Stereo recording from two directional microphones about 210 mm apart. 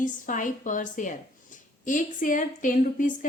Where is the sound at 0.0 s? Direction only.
40° left (ahead or behind).